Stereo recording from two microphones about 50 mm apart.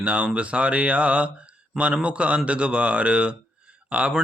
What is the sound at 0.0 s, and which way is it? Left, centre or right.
Speech, right.